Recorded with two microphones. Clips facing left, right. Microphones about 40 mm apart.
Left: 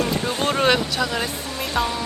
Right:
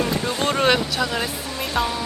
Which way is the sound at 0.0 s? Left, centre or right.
Right.